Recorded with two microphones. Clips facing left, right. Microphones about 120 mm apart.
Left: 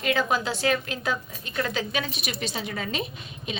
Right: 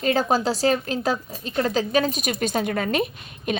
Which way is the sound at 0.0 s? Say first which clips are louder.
Right 4 dB; 35° right (ahead or behind).